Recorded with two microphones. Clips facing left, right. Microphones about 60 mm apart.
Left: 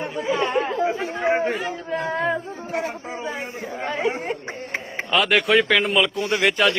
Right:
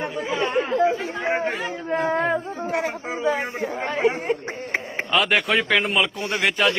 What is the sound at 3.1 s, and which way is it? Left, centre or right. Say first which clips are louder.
Speech: right 6 dB; right.